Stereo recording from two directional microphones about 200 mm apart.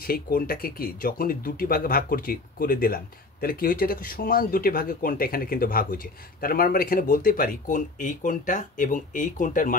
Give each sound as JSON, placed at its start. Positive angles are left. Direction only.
{"t": 0.0, "sound": "speech", "side_deg": 45}